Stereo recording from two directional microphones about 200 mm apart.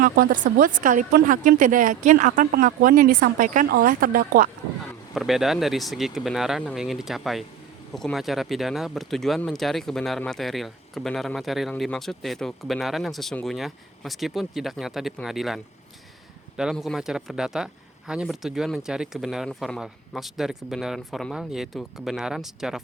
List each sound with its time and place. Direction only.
0.0 s a woman's voice: 45° right (ahead or behind)
5.1 s speech: centre (ahead or behind)